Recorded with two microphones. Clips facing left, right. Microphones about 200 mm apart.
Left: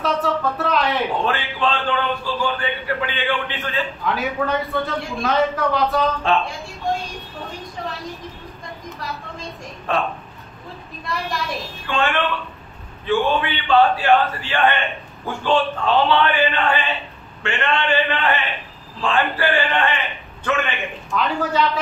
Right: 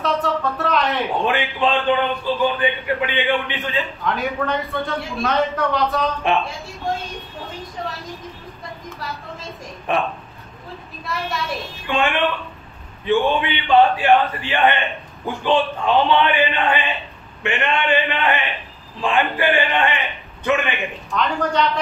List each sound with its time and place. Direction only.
0.0 s a sound: centre (ahead or behind)
1.2 s a man's voice: 15° right (ahead or behind)
4.0 s a man's voice: centre (ahead or behind)
6.3 s a man's voice: 15° right (ahead or behind)
9.9 s a man's voice: 15° right (ahead or behind)
11.1 s a man's voice: centre (ahead or behind)
11.9 s a man's voice: 15° right (ahead or behind)
21.1 s a man's voice: 5° left (ahead or behind)